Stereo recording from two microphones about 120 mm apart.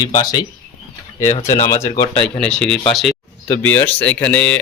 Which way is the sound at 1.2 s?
70° left (ahead or behind).